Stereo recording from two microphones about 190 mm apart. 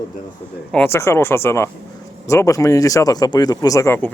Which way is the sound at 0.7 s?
10° left (ahead or behind).